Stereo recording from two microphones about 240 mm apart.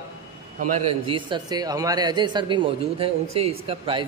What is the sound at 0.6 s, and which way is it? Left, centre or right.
A man's voice, right.